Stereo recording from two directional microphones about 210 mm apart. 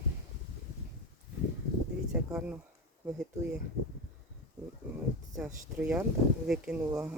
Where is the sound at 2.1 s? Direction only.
5° right (ahead or behind).